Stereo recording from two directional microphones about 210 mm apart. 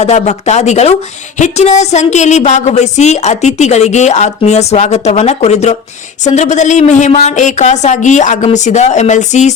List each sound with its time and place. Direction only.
0.0 s a woman's voice: 30° left (ahead or behind)